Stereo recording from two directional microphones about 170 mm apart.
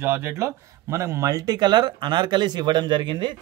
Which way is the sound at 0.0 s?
15° right (ahead or behind).